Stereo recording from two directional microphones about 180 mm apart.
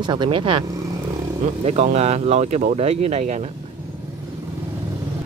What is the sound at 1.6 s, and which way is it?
Speech, 35° right (ahead or behind).